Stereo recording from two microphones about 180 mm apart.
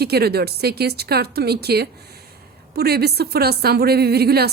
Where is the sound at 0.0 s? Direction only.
60° right (ahead or behind).